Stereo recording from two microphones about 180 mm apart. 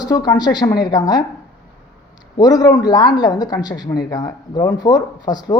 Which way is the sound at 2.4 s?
20° left (ahead or behind).